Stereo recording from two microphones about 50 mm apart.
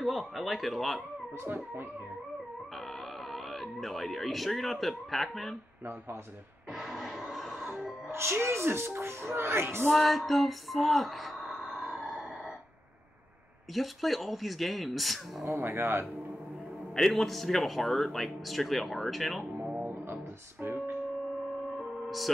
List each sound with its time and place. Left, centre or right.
0.0 s speech: centre
3.3 s speech: centre
6.7 s music: centre
8.1 s speech: right
9.9 s music: centre
13.7 s speech: centre
15.4 s speech: right
16.9 s speech: centre
20.6 s music: right
21.8 s music: centre